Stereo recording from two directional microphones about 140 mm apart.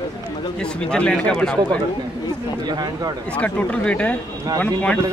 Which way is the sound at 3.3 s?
10° left (ahead or behind).